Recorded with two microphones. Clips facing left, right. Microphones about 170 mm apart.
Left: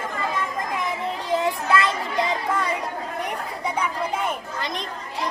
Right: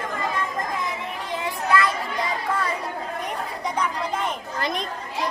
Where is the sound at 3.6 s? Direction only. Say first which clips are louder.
Left 1 dB; 10° left (ahead or behind).